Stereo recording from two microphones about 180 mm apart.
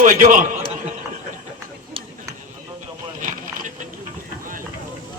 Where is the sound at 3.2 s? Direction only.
45° right (ahead or behind).